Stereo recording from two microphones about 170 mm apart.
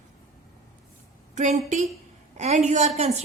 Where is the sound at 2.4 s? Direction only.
40° right (ahead or behind).